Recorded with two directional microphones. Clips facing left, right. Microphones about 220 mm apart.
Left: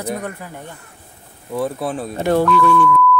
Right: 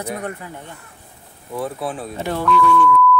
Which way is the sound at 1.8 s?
40° left (ahead or behind).